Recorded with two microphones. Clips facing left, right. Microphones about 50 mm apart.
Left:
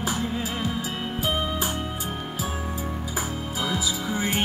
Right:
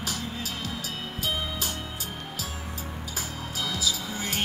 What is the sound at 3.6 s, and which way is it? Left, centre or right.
Music, left.